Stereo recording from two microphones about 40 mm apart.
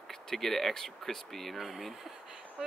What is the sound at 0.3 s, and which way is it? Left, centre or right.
Speech, centre.